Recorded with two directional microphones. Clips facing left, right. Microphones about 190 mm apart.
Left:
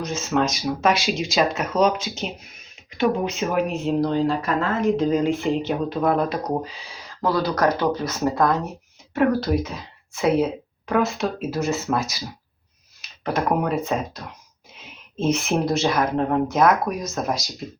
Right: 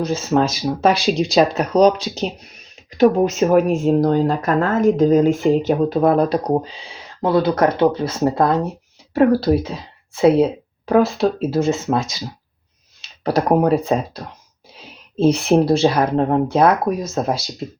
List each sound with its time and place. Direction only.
0.0 s speech: 35° right (ahead or behind)